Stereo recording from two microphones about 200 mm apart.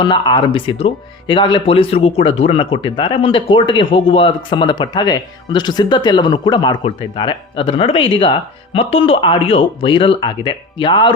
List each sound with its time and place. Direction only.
0.0 s speech: 25° left (ahead or behind)